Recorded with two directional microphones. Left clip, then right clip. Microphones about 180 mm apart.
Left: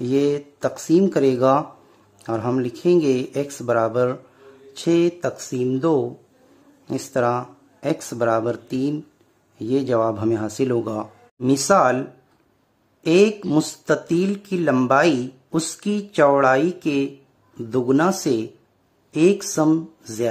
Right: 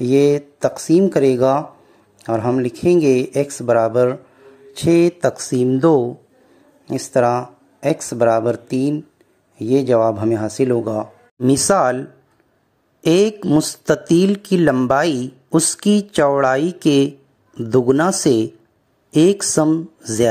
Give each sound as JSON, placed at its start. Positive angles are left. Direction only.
{"t": 0.0, "sound": "speech", "side_deg": -15}
{"t": 2.6, "sound": "speech", "side_deg": -15}
{"t": 6.9, "sound": "speech", "side_deg": -15}
{"t": 11.4, "sound": "speech", "side_deg": -25}